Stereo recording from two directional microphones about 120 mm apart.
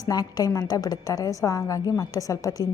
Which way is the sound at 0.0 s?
30° left (ahead or behind).